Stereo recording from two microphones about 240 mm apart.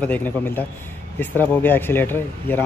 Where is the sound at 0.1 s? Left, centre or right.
Centre.